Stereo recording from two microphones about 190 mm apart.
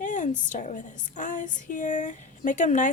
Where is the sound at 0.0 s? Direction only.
40° left (ahead or behind).